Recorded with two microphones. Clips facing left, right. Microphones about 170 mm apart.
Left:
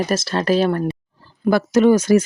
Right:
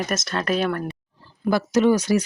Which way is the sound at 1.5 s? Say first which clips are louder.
Left 4 dB; 55° left (ahead or behind).